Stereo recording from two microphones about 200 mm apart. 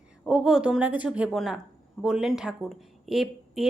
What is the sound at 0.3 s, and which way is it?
A woman's voice, centre (ahead or behind).